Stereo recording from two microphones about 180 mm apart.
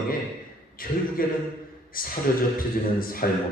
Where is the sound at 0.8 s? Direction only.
50° left (ahead or behind).